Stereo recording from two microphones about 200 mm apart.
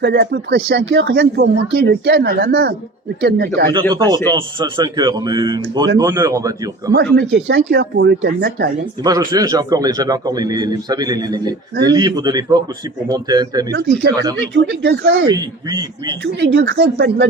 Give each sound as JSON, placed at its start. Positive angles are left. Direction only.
{"t": 0.0, "sound": "speech", "side_deg": -55}
{"t": 3.7, "sound": "a man's voice", "side_deg": -20}
{"t": 6.9, "sound": "speech", "side_deg": -60}
{"t": 9.0, "sound": "a man's voice", "side_deg": -20}
{"t": 13.7, "sound": "speech", "side_deg": -55}
{"t": 15.3, "sound": "a man's voice", "side_deg": -20}
{"t": 16.2, "sound": "speech", "side_deg": -60}